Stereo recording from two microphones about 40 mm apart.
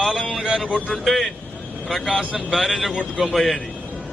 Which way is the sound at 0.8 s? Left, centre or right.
Centre.